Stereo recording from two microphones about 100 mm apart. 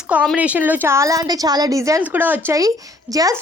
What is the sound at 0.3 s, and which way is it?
A woman's voice, 15° right (ahead or behind).